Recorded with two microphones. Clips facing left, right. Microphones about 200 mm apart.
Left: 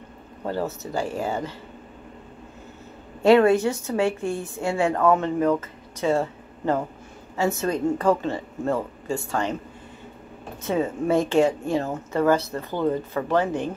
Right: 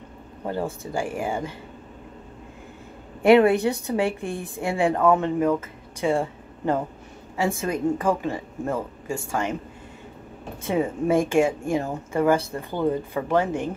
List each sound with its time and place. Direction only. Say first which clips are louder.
0.9 s a woman's voice: even; 15° right (ahead or behind)
3.2 s a woman's voice: even; 15° right (ahead or behind)
10.6 s a woman's voice: even; 15° right (ahead or behind)